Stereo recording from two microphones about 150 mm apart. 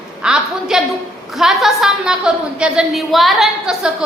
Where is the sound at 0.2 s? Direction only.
5° right (ahead or behind).